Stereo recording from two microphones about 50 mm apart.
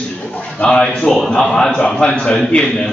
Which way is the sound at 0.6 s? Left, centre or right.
Centre.